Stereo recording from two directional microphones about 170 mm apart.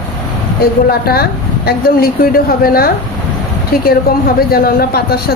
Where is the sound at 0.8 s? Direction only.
65° left (ahead or behind).